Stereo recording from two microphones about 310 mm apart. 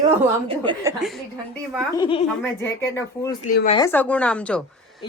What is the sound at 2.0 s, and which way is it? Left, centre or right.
Speech, centre.